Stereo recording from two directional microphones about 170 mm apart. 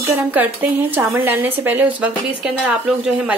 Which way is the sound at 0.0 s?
10° right (ahead or behind).